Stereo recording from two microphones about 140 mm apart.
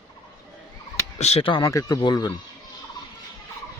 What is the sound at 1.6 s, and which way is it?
Speech, 25° left (ahead or behind).